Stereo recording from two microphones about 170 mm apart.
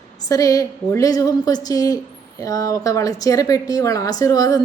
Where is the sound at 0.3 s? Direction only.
20° left (ahead or behind).